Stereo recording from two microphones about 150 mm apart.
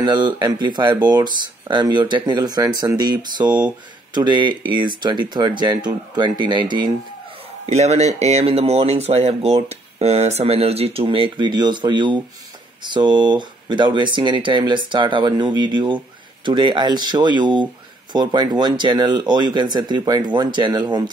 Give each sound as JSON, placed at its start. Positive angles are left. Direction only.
{"t": 0.0, "sound": "speech", "side_deg": -30}
{"t": 7.6, "sound": "speech", "side_deg": -45}